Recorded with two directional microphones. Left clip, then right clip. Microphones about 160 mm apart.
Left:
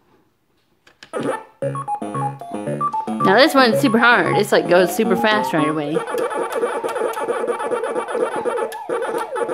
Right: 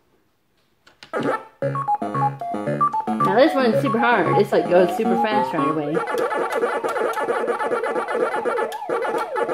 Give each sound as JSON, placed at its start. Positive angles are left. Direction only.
{"t": 1.1, "sound": "music", "side_deg": 0}
{"t": 3.3, "sound": "speech", "side_deg": 45}
{"t": 5.9, "sound": "a sound", "side_deg": 0}